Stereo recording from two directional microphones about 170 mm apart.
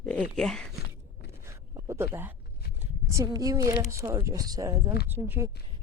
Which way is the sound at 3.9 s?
15° right (ahead or behind).